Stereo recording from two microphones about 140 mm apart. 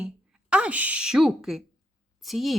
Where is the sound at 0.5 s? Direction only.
10° right (ahead or behind).